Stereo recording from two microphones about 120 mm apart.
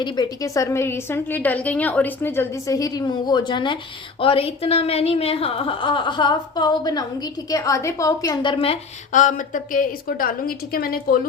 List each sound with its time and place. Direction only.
0.0 s a woman's voice: 30° left (ahead or behind)
2.6 s a woman's voice: 30° left (ahead or behind)
4.2 s a woman's voice: 50° left (ahead or behind); by 8.4 s 30° left (ahead or behind)
8.4 s a woman's voice: 50° left (ahead or behind)
9.1 s speech: 90° left